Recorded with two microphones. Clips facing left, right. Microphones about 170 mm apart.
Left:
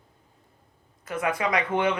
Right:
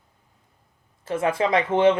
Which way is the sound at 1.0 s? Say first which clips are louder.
Right 4 dB; 25° right (ahead or behind).